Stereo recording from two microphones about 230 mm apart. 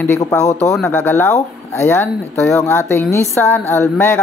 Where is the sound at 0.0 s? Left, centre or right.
Centre.